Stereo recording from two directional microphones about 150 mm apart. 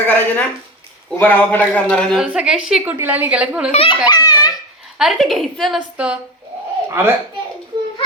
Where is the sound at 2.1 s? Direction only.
5° right (ahead or behind).